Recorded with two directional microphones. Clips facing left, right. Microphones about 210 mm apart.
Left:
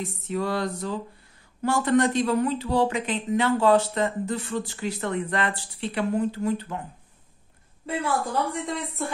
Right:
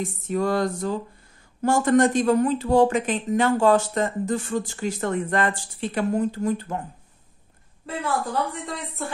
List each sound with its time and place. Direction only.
0.0 s speech: 45° right (ahead or behind)
7.8 s a woman's voice: centre (ahead or behind)